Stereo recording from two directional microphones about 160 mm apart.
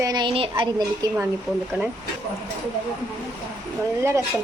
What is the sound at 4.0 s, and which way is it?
Speech, 15° right (ahead or behind).